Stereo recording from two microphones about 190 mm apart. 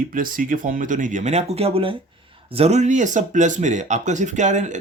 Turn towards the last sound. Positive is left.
turn(degrees=-40)  # may be behind; listen again after turning